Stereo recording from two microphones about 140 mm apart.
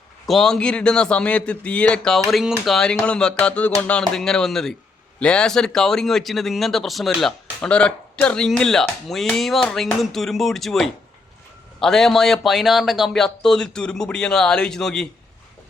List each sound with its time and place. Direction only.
0.3 s a man's voice: centre (ahead or behind)